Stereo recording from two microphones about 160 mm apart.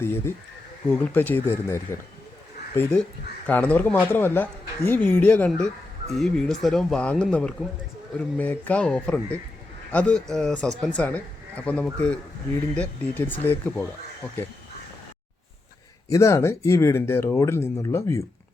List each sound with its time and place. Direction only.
0.0 s speech: 15° left (ahead or behind)
16.0 s speech: 20° left (ahead or behind)